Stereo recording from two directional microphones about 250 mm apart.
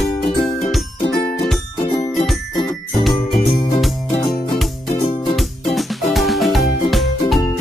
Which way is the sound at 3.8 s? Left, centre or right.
Centre.